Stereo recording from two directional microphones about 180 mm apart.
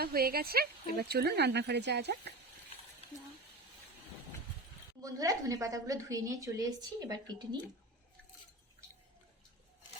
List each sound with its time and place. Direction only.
0.0 s speech: 55° right (ahead or behind)
5.0 s a woman's voice: 20° right (ahead or behind)